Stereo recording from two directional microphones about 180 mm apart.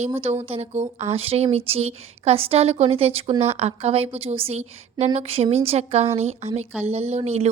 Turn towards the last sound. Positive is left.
turn(degrees=-35)  # may be behind; listen again after turning